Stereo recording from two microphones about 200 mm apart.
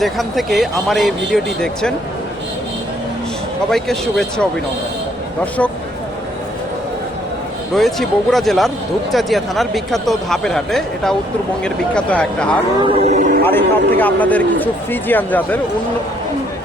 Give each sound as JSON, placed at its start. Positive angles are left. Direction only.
{"t": 0.0, "sound": "speech", "side_deg": 0}
{"t": 3.7, "sound": "speech", "side_deg": 0}
{"t": 7.7, "sound": "speech", "side_deg": 0}
{"t": 12.8, "sound": "a sound", "side_deg": -35}
{"t": 13.4, "sound": "a man's voice", "side_deg": 10}